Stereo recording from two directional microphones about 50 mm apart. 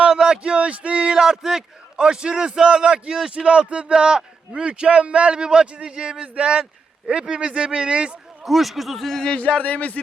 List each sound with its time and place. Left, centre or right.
0.0 s speech: centre
8.4 s speech: centre
9.4 s a man's voice: left